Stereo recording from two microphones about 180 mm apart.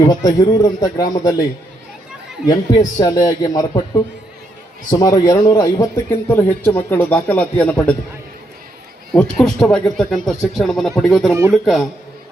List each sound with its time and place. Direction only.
0.0 s a man's voice: 20° left (ahead or behind)
2.5 s a man's voice: 20° left (ahead or behind)
4.9 s a man's voice: 20° left (ahead or behind)
9.1 s speech: 5° left (ahead or behind)